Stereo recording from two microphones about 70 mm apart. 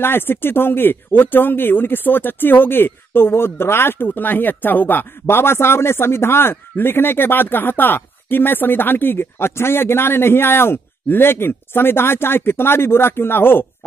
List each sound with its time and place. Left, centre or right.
0.0 s speech: left